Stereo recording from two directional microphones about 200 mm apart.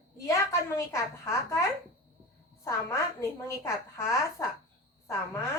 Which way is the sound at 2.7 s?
15° left (ahead or behind).